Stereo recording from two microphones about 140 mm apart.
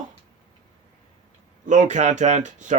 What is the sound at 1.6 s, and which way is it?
Speech, 60° right (ahead or behind).